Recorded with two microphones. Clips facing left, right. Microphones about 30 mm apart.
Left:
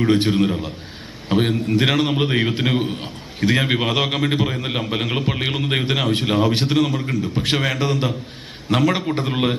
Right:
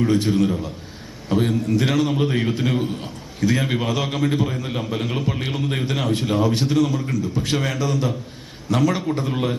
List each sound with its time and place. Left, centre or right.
0.1 s a man's voice: left